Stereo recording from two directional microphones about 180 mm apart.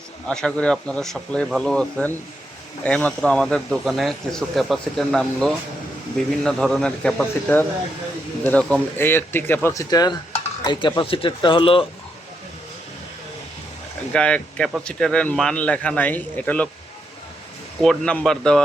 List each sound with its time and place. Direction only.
0.3 s speech: 5° left (ahead or behind); by 11.9 s 30° left (ahead or behind)
14.1 s speech: 5° left (ahead or behind)
17.8 s speech: 5° left (ahead or behind)